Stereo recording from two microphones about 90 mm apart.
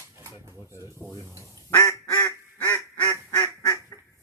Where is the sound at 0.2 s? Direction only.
30° right (ahead or behind).